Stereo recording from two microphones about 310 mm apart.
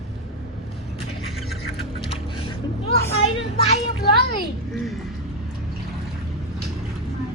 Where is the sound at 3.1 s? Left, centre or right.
Centre.